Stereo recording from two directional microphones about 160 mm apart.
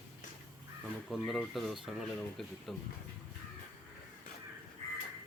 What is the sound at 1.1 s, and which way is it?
Speech, centre (ahead or behind).